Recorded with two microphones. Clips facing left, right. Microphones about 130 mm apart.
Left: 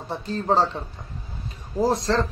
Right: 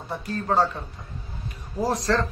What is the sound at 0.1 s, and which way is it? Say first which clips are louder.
Speech: left 2 dB; 25° left (ahead or behind).